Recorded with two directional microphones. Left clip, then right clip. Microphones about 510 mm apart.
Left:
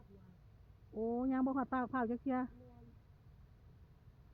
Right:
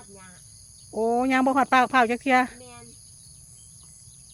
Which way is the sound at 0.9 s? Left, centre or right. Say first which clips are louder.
Right 16 dB; centre.